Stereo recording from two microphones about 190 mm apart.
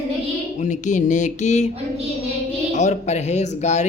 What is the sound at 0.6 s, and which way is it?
A woman's voice, 40° left (ahead or behind).